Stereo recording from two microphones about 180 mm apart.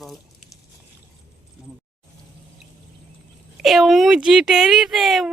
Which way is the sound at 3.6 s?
Centre (ahead or behind).